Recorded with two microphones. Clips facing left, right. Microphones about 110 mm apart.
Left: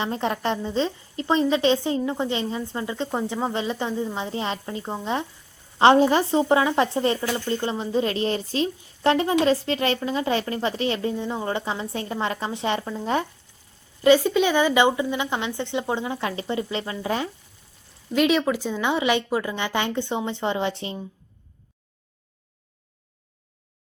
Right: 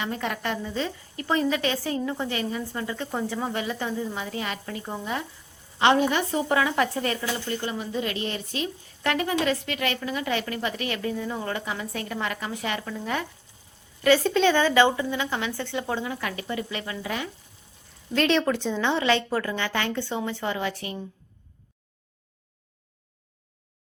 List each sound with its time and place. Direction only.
0.0 s a woman's voice: 30° left (ahead or behind)
14.0 s a woman's voice: 15° left (ahead or behind); by 17.2 s 30° left (ahead or behind)
18.1 s a woman's voice: 5° left (ahead or behind); by 21.0 s 25° left (ahead or behind)